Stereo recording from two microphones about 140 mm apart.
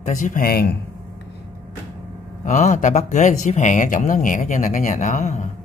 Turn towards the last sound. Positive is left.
turn(degrees=60)  # may be behind; listen again after turning